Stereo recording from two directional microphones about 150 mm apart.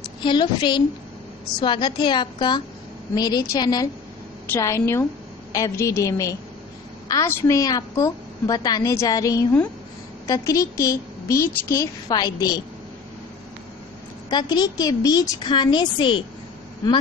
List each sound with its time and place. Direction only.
0.2 s a woman's voice: 30° left (ahead or behind)
14.3 s a woman's voice: 25° left (ahead or behind)